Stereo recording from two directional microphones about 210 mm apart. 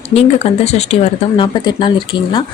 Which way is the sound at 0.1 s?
30° left (ahead or behind).